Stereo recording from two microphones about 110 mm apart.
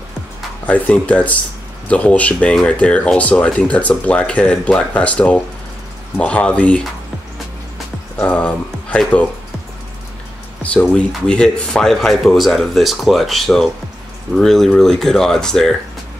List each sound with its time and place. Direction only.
0.7 s speech: 15° left (ahead or behind)
8.2 s speech: 10° left (ahead or behind)
10.6 s speech: 10° left (ahead or behind)